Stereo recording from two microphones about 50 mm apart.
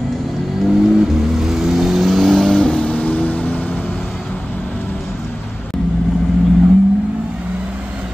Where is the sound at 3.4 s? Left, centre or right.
Left.